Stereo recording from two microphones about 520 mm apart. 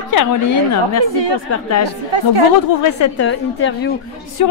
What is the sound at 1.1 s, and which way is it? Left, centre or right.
Speech, right.